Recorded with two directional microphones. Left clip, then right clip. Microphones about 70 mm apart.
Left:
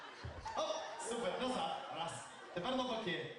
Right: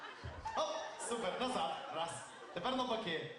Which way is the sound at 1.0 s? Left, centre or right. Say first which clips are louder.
Right 1 dB; right.